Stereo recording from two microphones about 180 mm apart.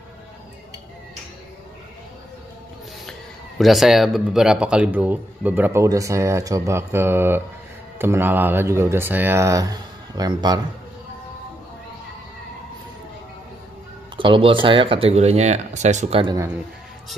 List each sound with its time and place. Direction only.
3.1 s speech: centre (ahead or behind); by 10.6 s 20° right (ahead or behind)
14.1 s speech: 30° right (ahead or behind)